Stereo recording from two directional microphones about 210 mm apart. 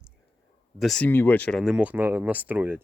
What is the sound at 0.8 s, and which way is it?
Speech, 5° left (ahead or behind).